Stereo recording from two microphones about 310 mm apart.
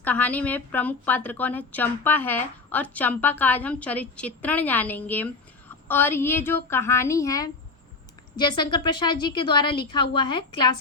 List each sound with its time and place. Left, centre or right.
0.0 s a woman's voice: centre